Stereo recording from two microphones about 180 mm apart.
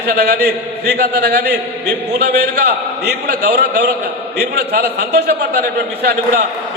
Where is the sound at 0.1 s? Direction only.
65° right (ahead or behind).